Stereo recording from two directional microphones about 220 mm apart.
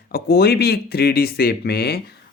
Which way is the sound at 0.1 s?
45° left (ahead or behind).